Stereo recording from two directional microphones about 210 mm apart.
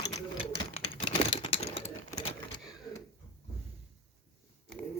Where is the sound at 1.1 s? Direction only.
25° left (ahead or behind).